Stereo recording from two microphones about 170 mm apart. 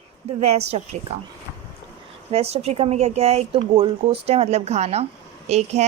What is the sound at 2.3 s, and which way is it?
Speech, 40° right (ahead or behind).